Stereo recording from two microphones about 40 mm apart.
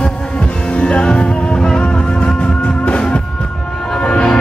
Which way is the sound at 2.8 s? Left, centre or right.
Left.